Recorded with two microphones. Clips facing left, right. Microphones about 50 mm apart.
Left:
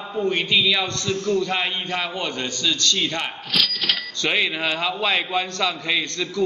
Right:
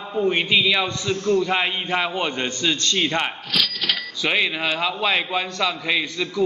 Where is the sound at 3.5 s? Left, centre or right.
Centre.